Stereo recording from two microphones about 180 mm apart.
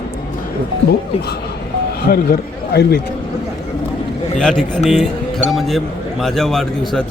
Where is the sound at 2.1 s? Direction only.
60° left (ahead or behind).